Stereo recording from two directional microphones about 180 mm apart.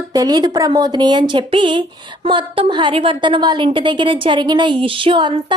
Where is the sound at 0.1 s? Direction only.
20° right (ahead or behind).